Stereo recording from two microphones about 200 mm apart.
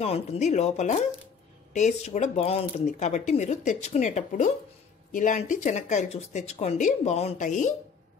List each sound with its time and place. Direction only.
0.0 s speech: 30° left (ahead or behind)